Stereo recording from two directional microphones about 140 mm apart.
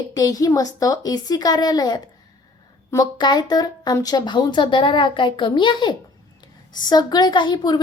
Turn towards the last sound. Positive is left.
turn(degrees=30)  # may be behind; listen again after turning